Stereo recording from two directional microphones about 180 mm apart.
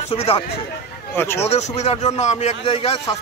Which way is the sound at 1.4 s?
40° left (ahead or behind).